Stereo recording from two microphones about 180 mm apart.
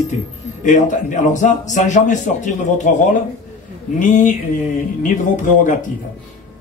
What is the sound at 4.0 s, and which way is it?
Speech, 45° left (ahead or behind).